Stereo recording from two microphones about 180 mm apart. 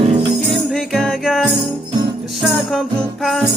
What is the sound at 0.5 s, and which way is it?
Music, centre (ahead or behind).